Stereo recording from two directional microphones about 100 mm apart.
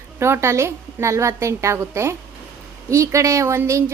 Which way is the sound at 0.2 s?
25° right (ahead or behind).